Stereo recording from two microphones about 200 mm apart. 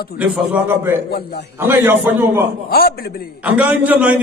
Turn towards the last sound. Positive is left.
turn(degrees=-5)  # may be behind; listen again after turning